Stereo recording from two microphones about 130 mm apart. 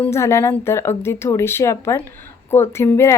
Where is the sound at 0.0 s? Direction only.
20° left (ahead or behind).